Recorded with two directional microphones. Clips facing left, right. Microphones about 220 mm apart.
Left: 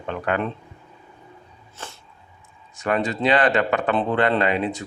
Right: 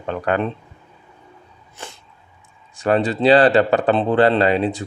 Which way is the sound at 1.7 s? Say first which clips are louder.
Right 2 dB; 15° right (ahead or behind).